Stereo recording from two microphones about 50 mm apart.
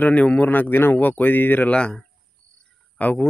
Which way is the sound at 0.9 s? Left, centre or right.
Left.